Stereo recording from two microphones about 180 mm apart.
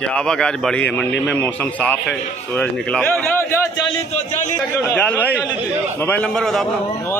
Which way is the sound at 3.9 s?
40° left (ahead or behind).